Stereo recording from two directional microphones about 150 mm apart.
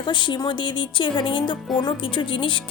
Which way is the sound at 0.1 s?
30° left (ahead or behind).